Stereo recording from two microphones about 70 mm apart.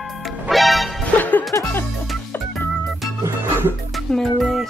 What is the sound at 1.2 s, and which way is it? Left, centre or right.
Music, left.